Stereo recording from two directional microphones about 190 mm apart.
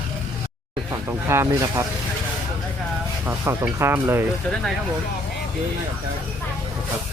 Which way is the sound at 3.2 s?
15° right (ahead or behind).